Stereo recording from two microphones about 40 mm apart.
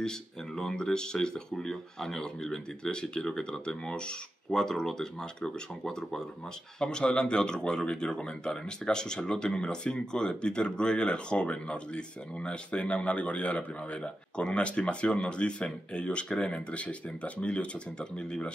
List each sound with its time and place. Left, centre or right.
0.6 s speech: centre